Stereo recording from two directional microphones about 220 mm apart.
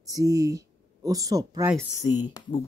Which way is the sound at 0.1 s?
15° right (ahead or behind).